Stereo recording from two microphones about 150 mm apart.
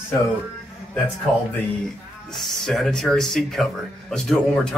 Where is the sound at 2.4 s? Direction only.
Centre (ahead or behind).